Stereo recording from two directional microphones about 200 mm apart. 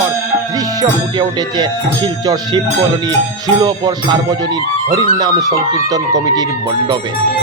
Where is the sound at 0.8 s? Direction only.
20° right (ahead or behind).